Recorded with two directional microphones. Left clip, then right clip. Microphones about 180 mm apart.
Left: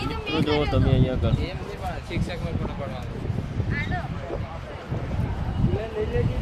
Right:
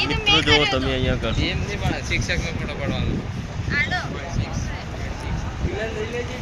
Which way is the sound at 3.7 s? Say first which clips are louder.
Right 9 dB; 35° left (ahead or behind).